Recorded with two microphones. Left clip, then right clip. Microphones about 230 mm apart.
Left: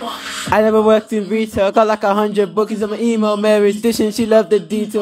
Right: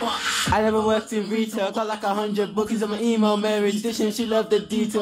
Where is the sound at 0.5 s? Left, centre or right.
Left.